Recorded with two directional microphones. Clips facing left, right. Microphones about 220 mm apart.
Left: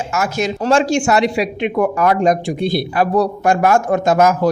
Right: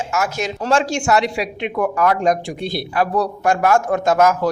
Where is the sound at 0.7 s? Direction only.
15° left (ahead or behind).